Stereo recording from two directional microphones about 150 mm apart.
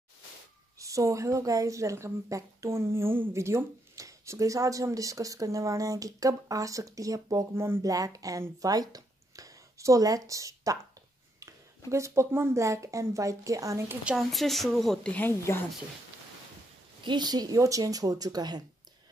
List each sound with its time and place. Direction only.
0.7 s speech: 20° right (ahead or behind)
14.0 s speech: centre (ahead or behind)
17.0 s speech: 30° right (ahead or behind)